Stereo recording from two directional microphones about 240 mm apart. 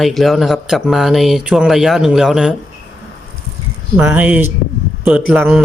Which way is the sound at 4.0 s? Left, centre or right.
Centre.